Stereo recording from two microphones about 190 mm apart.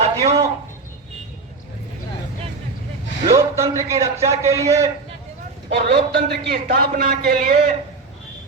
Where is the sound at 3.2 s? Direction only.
15° right (ahead or behind).